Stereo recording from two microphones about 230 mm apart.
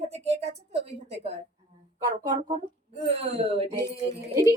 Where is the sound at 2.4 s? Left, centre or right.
Right.